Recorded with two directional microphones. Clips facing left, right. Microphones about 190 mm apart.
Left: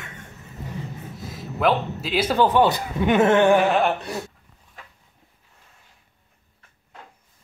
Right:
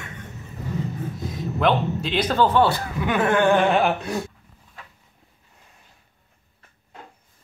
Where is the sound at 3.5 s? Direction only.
5° left (ahead or behind).